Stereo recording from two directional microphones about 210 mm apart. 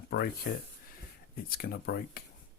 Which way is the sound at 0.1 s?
50° left (ahead or behind).